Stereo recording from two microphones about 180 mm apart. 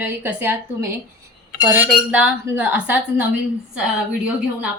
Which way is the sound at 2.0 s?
5° right (ahead or behind).